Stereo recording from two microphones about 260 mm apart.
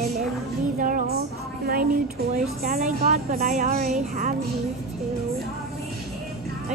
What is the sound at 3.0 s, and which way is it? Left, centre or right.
A woman's voice, right.